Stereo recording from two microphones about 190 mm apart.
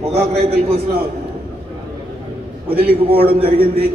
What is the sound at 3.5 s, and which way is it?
Speech, 50° right (ahead or behind).